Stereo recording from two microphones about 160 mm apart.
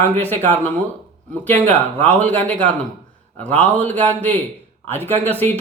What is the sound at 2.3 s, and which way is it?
Speech, 10° left (ahead or behind).